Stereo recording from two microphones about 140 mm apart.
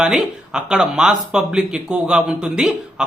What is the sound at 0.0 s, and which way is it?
Speech, 5° right (ahead or behind).